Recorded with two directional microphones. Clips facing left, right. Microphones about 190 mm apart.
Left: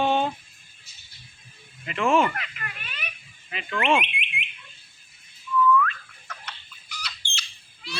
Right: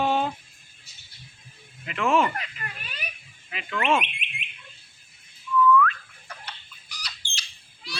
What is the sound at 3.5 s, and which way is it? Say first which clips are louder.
Speech: left 1 dB; 5° right (ahead or behind).